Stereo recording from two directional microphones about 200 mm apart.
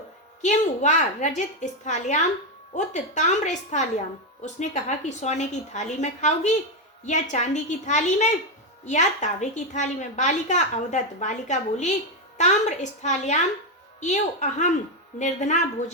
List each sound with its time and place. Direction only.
0.4 s a woman's voice: 35° left (ahead or behind)